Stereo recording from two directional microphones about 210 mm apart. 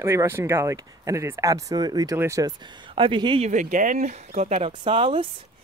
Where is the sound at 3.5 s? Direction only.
40° right (ahead or behind).